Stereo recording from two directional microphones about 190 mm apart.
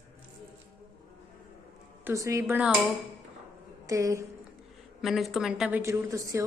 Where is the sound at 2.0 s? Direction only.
15° right (ahead or behind).